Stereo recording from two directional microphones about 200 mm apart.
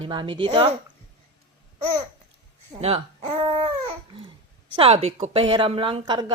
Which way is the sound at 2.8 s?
30° right (ahead or behind).